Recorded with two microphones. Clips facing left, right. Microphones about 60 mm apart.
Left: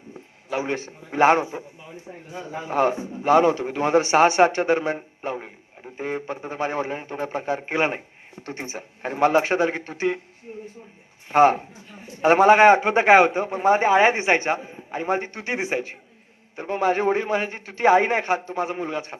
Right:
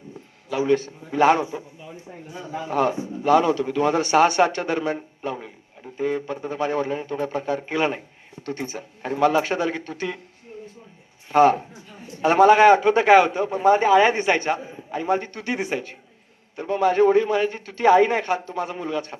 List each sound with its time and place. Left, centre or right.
0.5 s a man's voice: left
9.0 s a man's voice: left
11.3 s a man's voice: left
16.6 s a man's voice: left